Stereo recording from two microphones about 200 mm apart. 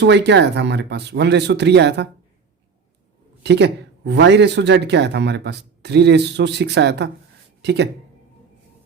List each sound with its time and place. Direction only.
0.0 s speech: 60° right (ahead or behind)
3.4 s speech: 60° right (ahead or behind)